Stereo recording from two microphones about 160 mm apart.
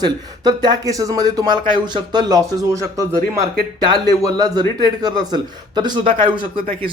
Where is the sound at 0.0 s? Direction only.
25° right (ahead or behind).